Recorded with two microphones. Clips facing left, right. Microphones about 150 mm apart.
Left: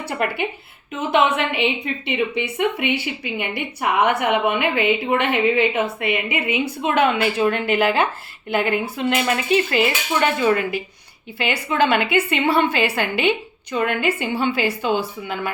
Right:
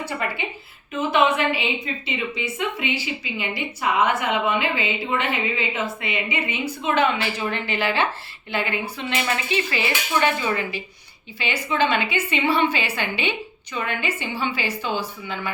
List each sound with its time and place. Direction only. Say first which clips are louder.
0.0 s a woman's voice: left 4 dB; 65° left (ahead or behind)